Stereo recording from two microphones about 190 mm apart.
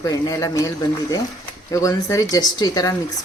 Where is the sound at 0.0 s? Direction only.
20° left (ahead or behind).